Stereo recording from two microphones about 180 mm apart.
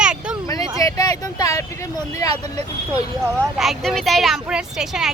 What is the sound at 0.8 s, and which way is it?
Speech, 20° left (ahead or behind).